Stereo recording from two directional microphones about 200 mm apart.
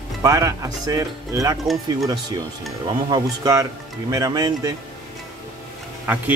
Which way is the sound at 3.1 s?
15° right (ahead or behind).